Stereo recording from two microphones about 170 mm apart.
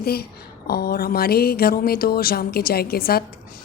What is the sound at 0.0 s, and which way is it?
Speech, 65° left (ahead or behind).